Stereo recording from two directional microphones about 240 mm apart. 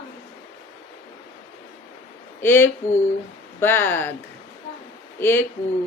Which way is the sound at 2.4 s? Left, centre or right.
Centre.